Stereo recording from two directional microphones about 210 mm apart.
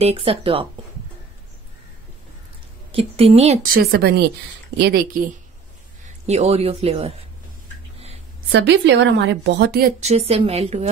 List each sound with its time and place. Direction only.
0.0 s speech: 25° right (ahead or behind)
2.9 s speech: 25° right (ahead or behind)
3.7 s a woman's voice: 50° right (ahead or behind)
6.2 s speech: 30° right (ahead or behind)
8.5 s a woman's voice: 60° right (ahead or behind); by 10.9 s 30° right (ahead or behind)